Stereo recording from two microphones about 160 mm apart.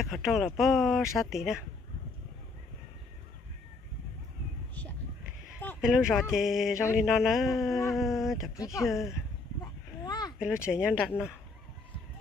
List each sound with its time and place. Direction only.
0.0 s speech: centre (ahead or behind)
5.8 s speech: 5° right (ahead or behind)
10.0 s a sound: 25° left (ahead or behind)
10.4 s speech: 5° right (ahead or behind)